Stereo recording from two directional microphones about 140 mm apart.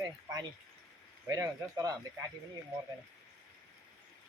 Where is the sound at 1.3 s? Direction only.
25° right (ahead or behind).